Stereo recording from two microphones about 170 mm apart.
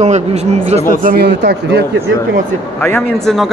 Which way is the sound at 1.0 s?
75° right (ahead or behind).